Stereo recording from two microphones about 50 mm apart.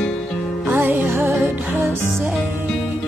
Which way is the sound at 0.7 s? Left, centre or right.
Right.